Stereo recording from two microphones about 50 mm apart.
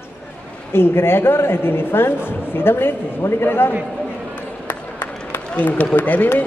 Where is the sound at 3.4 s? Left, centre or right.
Left.